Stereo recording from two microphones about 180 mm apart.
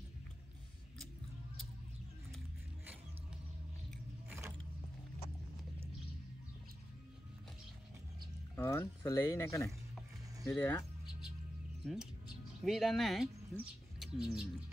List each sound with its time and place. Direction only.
4.3 s keys jangling: 15° right (ahead or behind)
8.5 s speech: 15° left (ahead or behind)
11.8 s speech: 5° right (ahead or behind)